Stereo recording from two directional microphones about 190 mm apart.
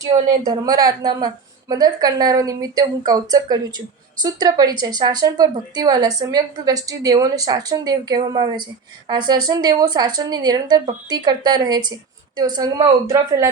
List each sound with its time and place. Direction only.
0.4 s speech: 20° right (ahead or behind)